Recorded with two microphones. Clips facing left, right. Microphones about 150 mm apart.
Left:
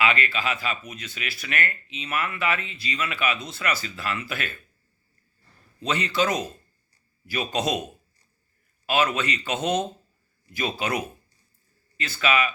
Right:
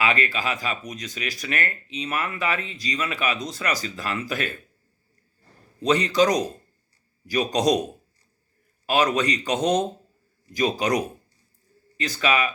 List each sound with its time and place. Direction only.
0.0 s speech: 35° right (ahead or behind)
5.8 s speech: 35° right (ahead or behind)
8.9 s speech: 40° right (ahead or behind)